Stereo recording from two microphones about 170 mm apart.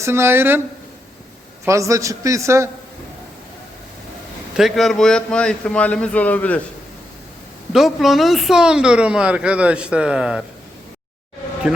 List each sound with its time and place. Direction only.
0.0 s a man's voice: 15° right (ahead or behind)
1.6 s a man's voice: 20° right (ahead or behind)
4.5 s speech: centre (ahead or behind)
7.7 s speech: centre (ahead or behind)